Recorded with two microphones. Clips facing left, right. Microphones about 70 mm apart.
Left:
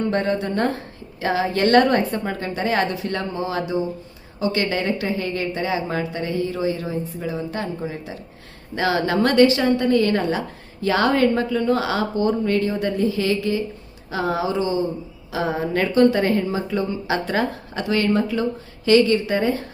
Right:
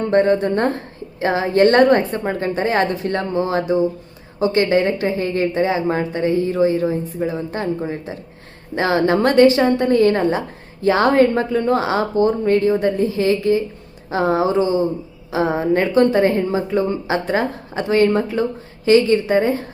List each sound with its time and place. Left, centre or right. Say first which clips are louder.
0.0 s a woman's voice: right 6 dB; right
8.7 s a woman's voice: right 4 dB; right
15.8 s a woman's voice: left 1 dB; right
16.1 s a woman's voice: right 4 dB; right